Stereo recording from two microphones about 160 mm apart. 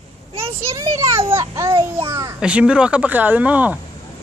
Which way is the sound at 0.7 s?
20° right (ahead or behind).